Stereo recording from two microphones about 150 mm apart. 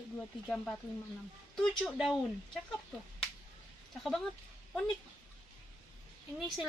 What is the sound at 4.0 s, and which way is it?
Speech, 5° left (ahead or behind).